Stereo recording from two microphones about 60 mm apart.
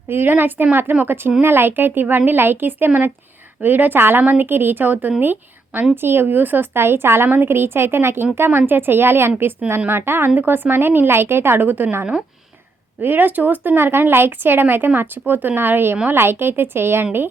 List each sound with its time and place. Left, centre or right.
0.1 s speech: right
13.0 s speech: right